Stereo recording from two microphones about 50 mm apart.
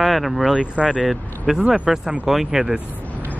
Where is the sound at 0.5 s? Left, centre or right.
Centre.